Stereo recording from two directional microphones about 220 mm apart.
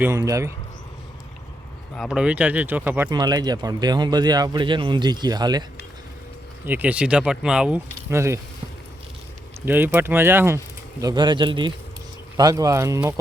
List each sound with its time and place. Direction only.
0.0 s speech: 15° right (ahead or behind)
2.0 s speech: centre (ahead or behind); by 5.6 s 20° right (ahead or behind)
6.7 s speech: 5° right (ahead or behind)
9.6 s speech: 10° right (ahead or behind)